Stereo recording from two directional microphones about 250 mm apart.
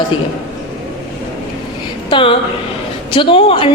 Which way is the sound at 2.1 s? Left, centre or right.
Centre.